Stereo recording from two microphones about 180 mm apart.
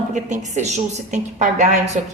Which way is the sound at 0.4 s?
40° right (ahead or behind).